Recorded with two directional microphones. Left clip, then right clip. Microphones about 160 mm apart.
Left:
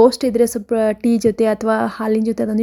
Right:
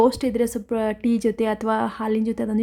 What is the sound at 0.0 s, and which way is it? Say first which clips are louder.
A woman's voice: left 7 dB; 20° left (ahead or behind).